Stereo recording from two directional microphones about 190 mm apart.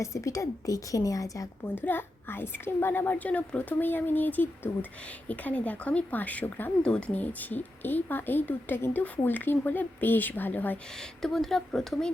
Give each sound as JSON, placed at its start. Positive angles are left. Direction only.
{"t": 0.0, "sound": "speech", "side_deg": 15}